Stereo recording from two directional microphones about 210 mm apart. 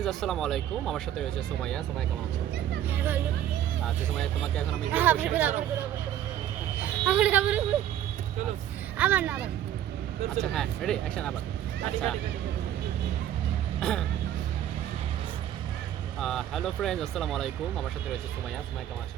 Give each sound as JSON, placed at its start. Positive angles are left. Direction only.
{"t": 0.0, "sound": "speech", "side_deg": 0}
{"t": 2.9, "sound": "speech", "side_deg": -10}
{"t": 3.8, "sound": "speech", "side_deg": 5}
{"t": 4.9, "sound": "speech", "side_deg": -10}
{"t": 6.8, "sound": "speech", "side_deg": -5}
{"t": 9.0, "sound": "speech", "side_deg": -5}
{"t": 10.5, "sound": "speech", "side_deg": 5}
{"t": 13.7, "sound": "speech", "side_deg": 5}
{"t": 16.2, "sound": "speech", "side_deg": 0}